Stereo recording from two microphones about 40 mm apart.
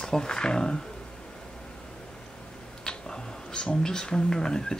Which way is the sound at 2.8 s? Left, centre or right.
Centre.